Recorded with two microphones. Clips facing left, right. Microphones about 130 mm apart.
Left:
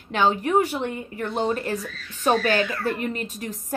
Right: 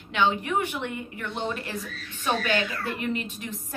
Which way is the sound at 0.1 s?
40° left (ahead or behind).